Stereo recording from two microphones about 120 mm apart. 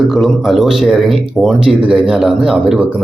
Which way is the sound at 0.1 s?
Centre (ahead or behind).